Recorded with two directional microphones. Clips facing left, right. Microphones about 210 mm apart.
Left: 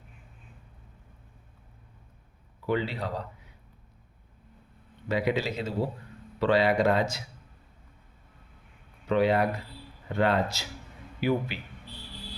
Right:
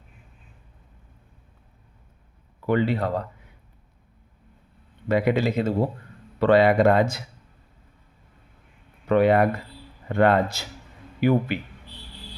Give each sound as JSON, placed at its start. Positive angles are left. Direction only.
{"t": 2.6, "sound": "speech", "side_deg": -55}
{"t": 5.0, "sound": "speech", "side_deg": -55}
{"t": 9.0, "sound": "speech", "side_deg": -55}